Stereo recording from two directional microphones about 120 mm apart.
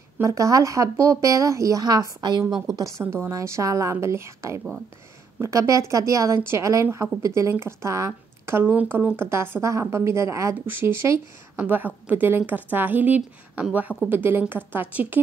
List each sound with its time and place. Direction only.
0.2 s a woman's voice: 30° right (ahead or behind)